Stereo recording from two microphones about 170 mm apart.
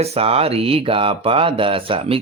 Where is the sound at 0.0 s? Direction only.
35° right (ahead or behind).